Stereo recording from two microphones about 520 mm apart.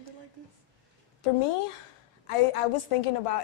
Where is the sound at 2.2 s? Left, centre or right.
Left.